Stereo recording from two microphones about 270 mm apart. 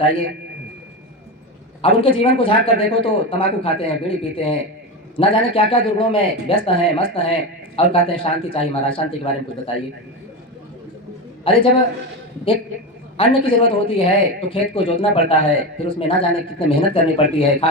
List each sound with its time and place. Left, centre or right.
1.8 s a man's voice: centre
11.5 s a man's voice: centre
13.1 s a man's voice: centre